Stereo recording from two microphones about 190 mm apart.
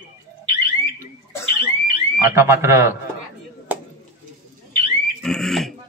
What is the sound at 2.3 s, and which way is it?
Speech, 15° right (ahead or behind).